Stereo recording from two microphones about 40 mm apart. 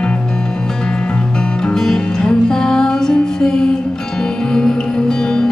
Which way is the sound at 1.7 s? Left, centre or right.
Centre.